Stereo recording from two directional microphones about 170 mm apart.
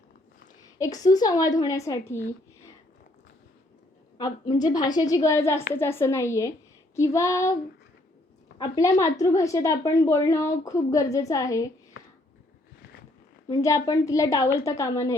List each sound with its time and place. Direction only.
0.8 s a woman's voice: 20° left (ahead or behind)
4.2 s a woman's voice: 20° left (ahead or behind)
8.5 s a woman's voice: 25° left (ahead or behind)
13.5 s a woman's voice: 20° left (ahead or behind)